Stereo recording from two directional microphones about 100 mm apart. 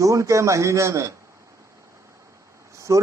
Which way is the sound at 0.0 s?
30° right (ahead or behind).